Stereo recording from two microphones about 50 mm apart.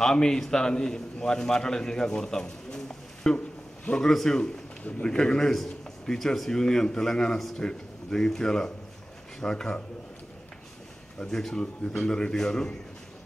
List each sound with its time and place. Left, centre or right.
0.0 s a man's voice: centre
3.3 s a sound: left
4.0 s a man's voice: centre
11.1 s a man's voice: centre